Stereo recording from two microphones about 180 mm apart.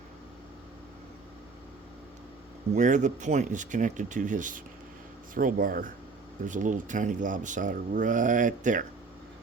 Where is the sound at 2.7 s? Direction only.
45° right (ahead or behind).